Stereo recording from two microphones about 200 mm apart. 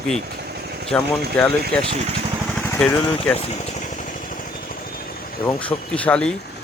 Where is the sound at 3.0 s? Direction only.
25° left (ahead or behind).